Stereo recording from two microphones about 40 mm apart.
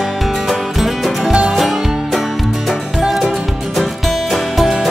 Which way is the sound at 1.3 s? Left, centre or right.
Centre.